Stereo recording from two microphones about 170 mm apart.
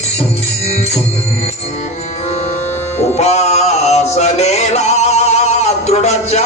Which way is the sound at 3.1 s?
40° left (ahead or behind).